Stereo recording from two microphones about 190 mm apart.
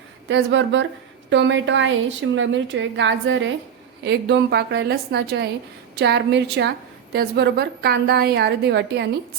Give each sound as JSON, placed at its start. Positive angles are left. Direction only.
{"t": 0.3, "sound": "a woman's voice", "side_deg": -75}
{"t": 4.0, "sound": "a woman's voice", "side_deg": -65}